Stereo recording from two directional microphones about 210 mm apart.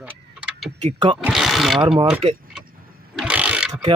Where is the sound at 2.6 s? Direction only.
45° right (ahead or behind).